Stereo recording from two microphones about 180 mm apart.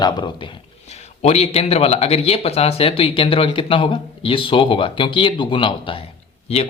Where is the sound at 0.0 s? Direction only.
25° left (ahead or behind).